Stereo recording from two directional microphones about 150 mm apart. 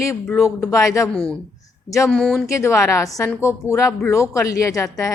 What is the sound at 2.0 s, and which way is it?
Speech, 5° left (ahead or behind).